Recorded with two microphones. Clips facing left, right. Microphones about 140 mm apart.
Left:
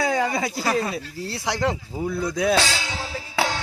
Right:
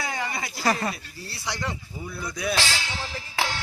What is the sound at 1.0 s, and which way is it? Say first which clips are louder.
Speech: left 7 dB; 90° left.